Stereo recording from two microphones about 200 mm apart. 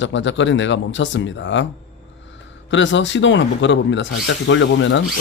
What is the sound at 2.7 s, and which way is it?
Speech, 65° left (ahead or behind).